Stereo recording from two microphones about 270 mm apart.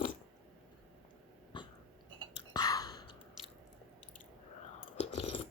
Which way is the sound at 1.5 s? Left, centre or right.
Centre.